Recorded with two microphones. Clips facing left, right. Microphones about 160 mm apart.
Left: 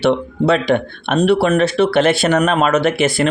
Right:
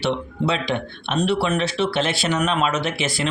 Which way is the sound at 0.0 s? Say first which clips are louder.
Left 8 dB; 55° left (ahead or behind).